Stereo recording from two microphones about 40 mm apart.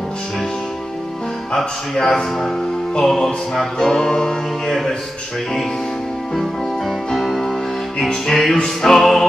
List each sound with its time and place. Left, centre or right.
1.6 s music: centre
7.2 s music: centre